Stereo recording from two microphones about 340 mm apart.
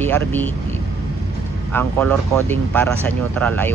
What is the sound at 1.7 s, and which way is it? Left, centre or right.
Speech, centre.